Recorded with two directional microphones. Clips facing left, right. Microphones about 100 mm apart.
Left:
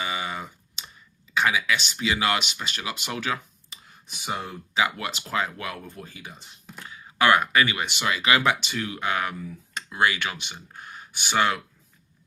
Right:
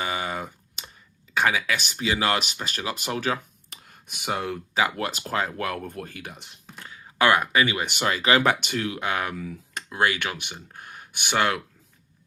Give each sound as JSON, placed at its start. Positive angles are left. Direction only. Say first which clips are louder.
{"t": 0.0, "sound": "computer keyboard", "louder": "right 2 dB", "side_deg": -45}
{"t": 1.3, "sound": "speech", "louder": "even", "side_deg": -45}
{"t": 3.7, "sound": "clicking", "louder": "right 1 dB", "side_deg": -55}
{"t": 4.7, "sound": "speech", "louder": "even", "side_deg": -40}
{"t": 7.9, "sound": "speech", "louder": "right 1 dB", "side_deg": -45}
{"t": 8.6, "sound": "speech", "louder": "right 1 dB", "side_deg": -55}